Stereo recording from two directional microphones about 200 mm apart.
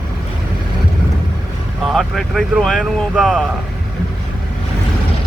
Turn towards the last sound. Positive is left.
turn(degrees=0)  # may be behind; listen again after turning